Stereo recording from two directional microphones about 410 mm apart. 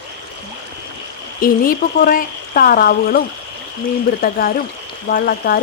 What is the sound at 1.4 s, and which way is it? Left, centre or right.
Speech, left.